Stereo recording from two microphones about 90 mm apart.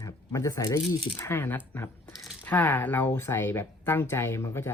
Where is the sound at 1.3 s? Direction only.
25° left (ahead or behind).